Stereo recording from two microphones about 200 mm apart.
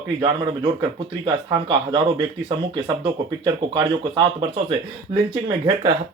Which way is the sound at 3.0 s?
20° right (ahead or behind).